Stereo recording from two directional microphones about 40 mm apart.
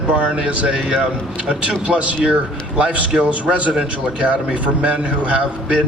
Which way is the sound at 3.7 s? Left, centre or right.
Centre.